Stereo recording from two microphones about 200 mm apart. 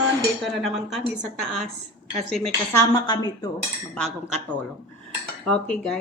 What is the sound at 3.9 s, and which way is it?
Cutlery, 5° left (ahead or behind).